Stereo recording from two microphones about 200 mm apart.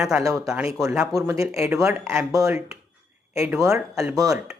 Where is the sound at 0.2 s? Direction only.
15° right (ahead or behind).